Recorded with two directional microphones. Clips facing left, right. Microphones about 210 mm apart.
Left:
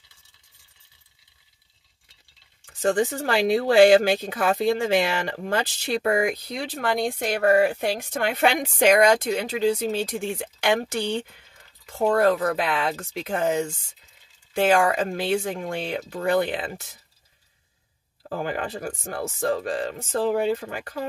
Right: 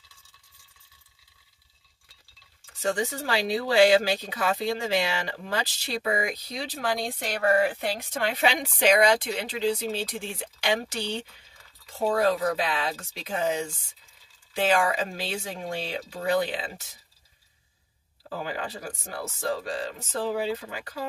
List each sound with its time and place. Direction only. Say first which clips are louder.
2.8 s speech: left 6 dB; 50° left (ahead or behind)
18.3 s speech: left 5 dB; 50° left (ahead or behind)